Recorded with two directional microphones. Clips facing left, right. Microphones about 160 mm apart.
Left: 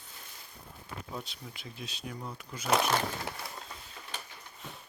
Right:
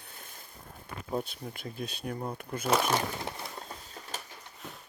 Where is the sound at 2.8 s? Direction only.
20° right (ahead or behind).